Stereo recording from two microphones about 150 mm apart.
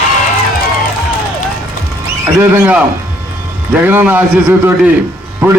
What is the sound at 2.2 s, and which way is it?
Speech, 10° right (ahead or behind).